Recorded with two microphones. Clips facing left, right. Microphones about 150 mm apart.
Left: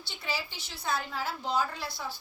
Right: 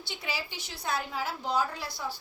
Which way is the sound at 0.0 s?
15° right (ahead or behind).